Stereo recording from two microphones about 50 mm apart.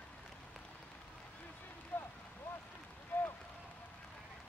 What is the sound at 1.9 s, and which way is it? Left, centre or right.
Boat, left.